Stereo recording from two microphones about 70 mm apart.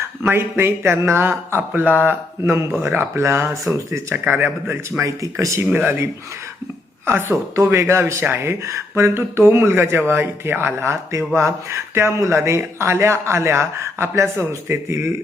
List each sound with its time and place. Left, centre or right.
0.2 s speech: right
2.4 s speech: right
4.1 s speech: right
4.9 s speech: right
5.7 s speech: right